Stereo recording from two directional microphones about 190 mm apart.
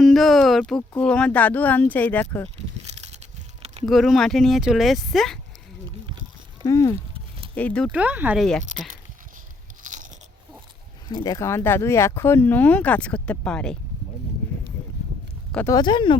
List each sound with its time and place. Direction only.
0.0 s a sound: centre (ahead or behind)
0.8 s speech: 5° left (ahead or behind)
3.8 s speech: centre (ahead or behind)
6.7 s speech: 15° left (ahead or behind)
7.5 s speech: 5° left (ahead or behind)
7.9 s speech: 10° right (ahead or behind)
8.4 s speech: 5° left (ahead or behind)
9.8 s biting: 40° right (ahead or behind)
11.1 s speech: 20° left (ahead or behind)
15.5 s speech: 15° left (ahead or behind)